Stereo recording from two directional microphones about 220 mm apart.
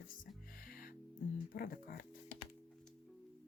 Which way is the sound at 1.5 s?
40° left (ahead or behind).